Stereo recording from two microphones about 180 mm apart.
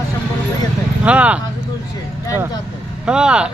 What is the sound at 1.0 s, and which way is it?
Speech, 5° right (ahead or behind).